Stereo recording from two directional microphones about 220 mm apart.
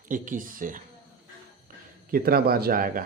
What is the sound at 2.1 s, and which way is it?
Speech, 40° right (ahead or behind).